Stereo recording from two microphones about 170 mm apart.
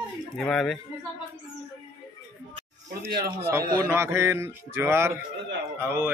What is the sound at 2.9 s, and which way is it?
Speech, 65° right (ahead or behind).